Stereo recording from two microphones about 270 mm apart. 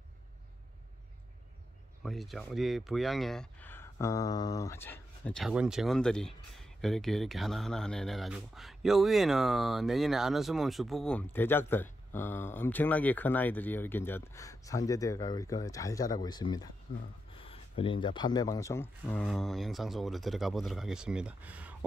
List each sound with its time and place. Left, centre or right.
2.0 s speech: centre